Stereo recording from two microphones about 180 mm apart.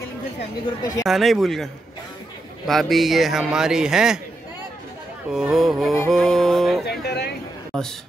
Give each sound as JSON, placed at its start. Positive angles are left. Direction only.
{"t": 0.7, "sound": "speech", "side_deg": 20}
{"t": 1.0, "sound": "a man's voice", "side_deg": 0}
{"t": 5.3, "sound": "a man's voice", "side_deg": 0}
{"t": 6.9, "sound": "speech", "side_deg": 65}
{"t": 7.7, "sound": "a man's voice", "side_deg": 5}